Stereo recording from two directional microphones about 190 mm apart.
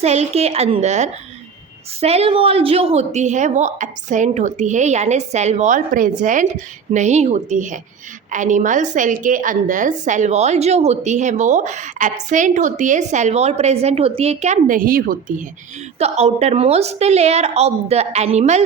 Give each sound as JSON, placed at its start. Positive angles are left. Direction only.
{"t": 0.0, "sound": "a woman's voice", "side_deg": -35}
{"t": 16.0, "sound": "a woman's voice", "side_deg": -35}